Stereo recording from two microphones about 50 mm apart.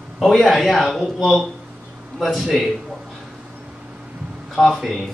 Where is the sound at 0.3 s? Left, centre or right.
Centre.